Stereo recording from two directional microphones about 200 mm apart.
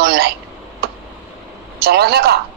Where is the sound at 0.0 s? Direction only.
55° right (ahead or behind).